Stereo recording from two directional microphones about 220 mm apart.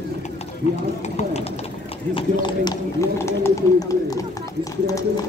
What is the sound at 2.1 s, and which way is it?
Speech, 20° left (ahead or behind).